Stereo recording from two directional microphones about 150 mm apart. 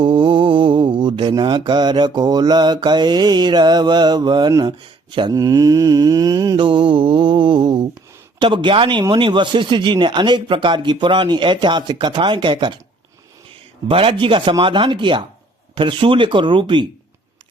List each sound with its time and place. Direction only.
0.0 s mantra: 35° right (ahead or behind)
8.4 s speech: 35° right (ahead or behind)
13.8 s speech: 40° right (ahead or behind)